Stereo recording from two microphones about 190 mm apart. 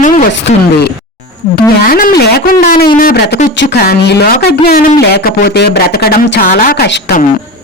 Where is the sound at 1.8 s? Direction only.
50° left (ahead or behind).